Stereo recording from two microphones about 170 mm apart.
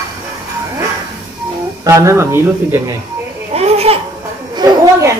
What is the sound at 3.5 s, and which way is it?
Babbling, 35° right (ahead or behind).